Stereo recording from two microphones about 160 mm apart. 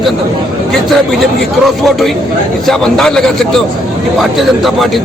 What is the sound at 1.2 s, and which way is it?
A man's voice, centre (ahead or behind).